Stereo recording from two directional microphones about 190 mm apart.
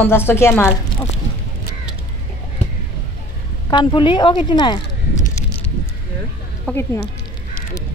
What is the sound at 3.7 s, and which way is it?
Speech, 25° left (ahead or behind).